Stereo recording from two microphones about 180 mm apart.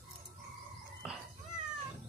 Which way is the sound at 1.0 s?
5° right (ahead or behind).